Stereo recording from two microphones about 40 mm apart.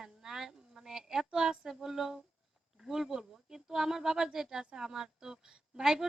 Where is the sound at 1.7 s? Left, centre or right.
Centre.